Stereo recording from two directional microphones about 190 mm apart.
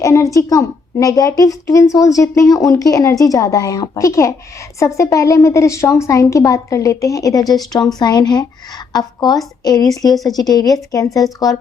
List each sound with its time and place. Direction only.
0.0 s a woman's voice: 15° left (ahead or behind)